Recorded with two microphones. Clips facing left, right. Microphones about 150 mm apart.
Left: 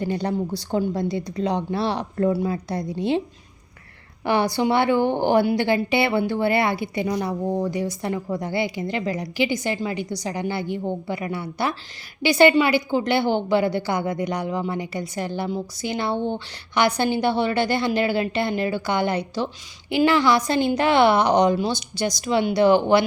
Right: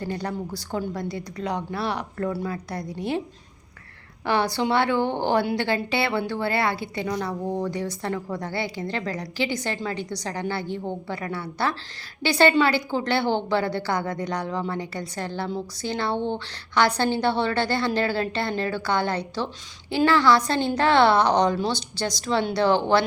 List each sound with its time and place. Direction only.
0.0 s a woman's voice: 20° left (ahead or behind)
4.3 s a woman's voice: 15° left (ahead or behind)